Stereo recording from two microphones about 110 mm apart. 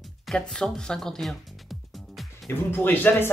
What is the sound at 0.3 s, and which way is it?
Speech, 5° left (ahead or behind).